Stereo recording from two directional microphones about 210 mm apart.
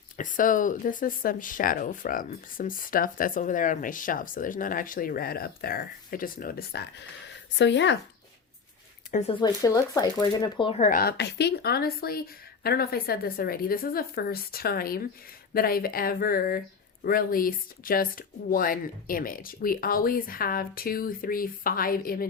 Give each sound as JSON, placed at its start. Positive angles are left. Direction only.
{"t": 0.2, "sound": "speech", "side_deg": 40}
{"t": 9.4, "sound": "speech", "side_deg": 15}